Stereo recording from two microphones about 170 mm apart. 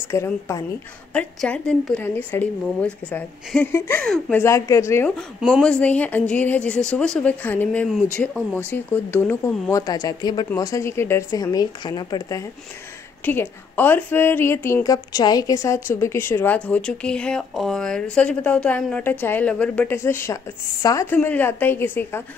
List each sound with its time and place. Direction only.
0.1 s speech: 15° left (ahead or behind)
5.1 s speech: centre (ahead or behind); by 12.4 s 20° left (ahead or behind)
13.2 s speech: 10° left (ahead or behind)